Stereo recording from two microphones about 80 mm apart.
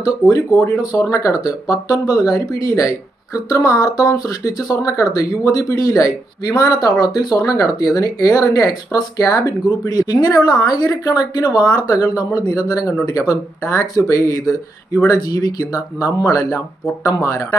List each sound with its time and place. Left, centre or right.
0.0 s speech: left
13.7 s speech: left
15.2 s speech: left